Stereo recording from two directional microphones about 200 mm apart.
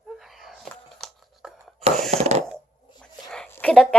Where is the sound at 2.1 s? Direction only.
30° right (ahead or behind).